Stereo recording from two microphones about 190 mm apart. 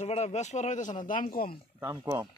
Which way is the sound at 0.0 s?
35° left (ahead or behind).